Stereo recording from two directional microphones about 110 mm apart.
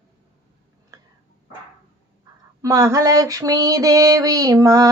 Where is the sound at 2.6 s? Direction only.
30° right (ahead or behind).